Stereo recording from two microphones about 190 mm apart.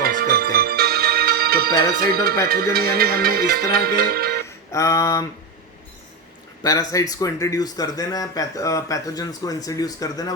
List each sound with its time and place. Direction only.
0.0 s music: 50° right (ahead or behind)
4.7 s a sound: 15° left (ahead or behind)
6.6 s speech: 20° left (ahead or behind)